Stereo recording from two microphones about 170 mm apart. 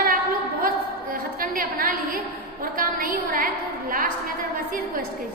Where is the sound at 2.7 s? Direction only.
55° right (ahead or behind).